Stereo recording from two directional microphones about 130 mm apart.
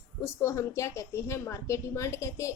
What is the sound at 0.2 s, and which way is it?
A woman's voice, 20° left (ahead or behind).